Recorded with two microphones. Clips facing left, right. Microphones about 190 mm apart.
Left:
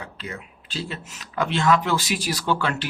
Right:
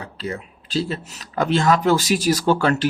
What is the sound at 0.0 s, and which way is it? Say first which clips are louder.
Speech: right 6 dB; 35° right (ahead or behind).